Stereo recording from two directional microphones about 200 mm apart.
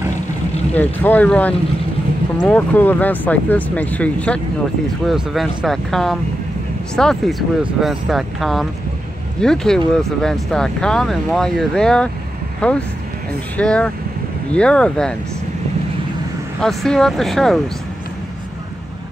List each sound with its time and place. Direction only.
0.7 s speech: 10° left (ahead or behind)
16.6 s speech: 5° left (ahead or behind)